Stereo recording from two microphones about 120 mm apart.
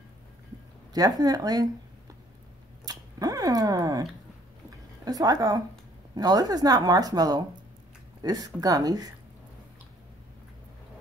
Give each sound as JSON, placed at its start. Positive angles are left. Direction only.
{"t": 0.9, "sound": "speech", "side_deg": -30}
{"t": 2.8, "sound": "dog", "side_deg": -35}
{"t": 4.6, "sound": "a sound", "side_deg": -30}
{"t": 6.1, "sound": "speech", "side_deg": -35}